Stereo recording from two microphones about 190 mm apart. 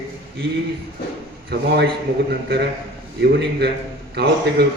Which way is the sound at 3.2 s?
60° right (ahead or behind).